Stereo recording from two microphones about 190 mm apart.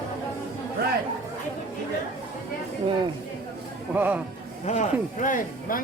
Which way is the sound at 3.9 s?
10° right (ahead or behind).